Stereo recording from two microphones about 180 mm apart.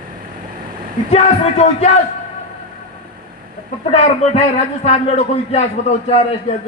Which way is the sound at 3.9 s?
35° left (ahead or behind).